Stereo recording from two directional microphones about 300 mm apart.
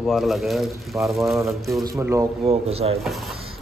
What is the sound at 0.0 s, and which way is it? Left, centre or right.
A man's voice, centre.